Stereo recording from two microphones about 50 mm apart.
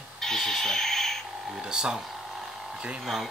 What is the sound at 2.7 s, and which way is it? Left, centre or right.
Speech, centre.